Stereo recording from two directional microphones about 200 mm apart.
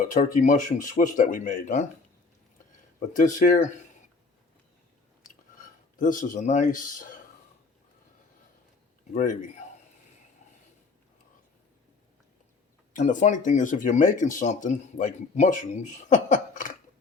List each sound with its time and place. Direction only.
0.1 s speech: 40° left (ahead or behind)
3.1 s speech: 40° left (ahead or behind)
5.5 s a man's voice: 40° left (ahead or behind)
9.1 s speech: 40° left (ahead or behind)
13.0 s speech: 40° left (ahead or behind)